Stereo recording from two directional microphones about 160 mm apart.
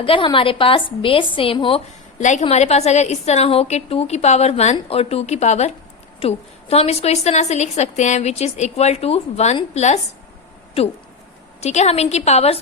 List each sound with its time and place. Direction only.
0.0 s speech: 30° left (ahead or behind)
2.1 s a woman's voice: 45° left (ahead or behind)
11.6 s a woman's voice: 45° left (ahead or behind)